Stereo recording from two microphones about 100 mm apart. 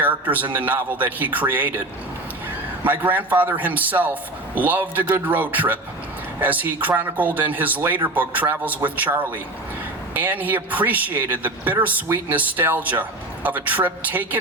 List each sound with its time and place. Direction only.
0.0 s a man's voice: 15° right (ahead or behind)
2.8 s a man's voice: 15° right (ahead or behind)
10.2 s a man's voice: 15° right (ahead or behind)